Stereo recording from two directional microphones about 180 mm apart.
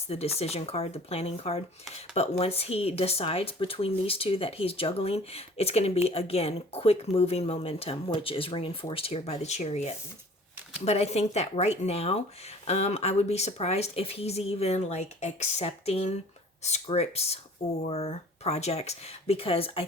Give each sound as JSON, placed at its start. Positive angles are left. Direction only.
{"t": 0.1, "sound": "speech", "side_deg": 35}